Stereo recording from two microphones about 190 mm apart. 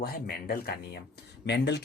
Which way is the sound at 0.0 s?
50° left (ahead or behind).